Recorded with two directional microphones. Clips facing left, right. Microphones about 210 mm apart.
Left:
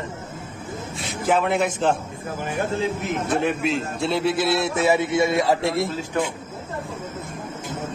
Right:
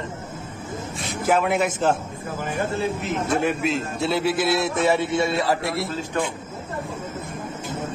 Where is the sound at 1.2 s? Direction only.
5° right (ahead or behind).